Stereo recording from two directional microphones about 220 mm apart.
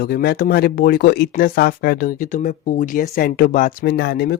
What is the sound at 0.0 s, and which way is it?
Speech, 45° left (ahead or behind).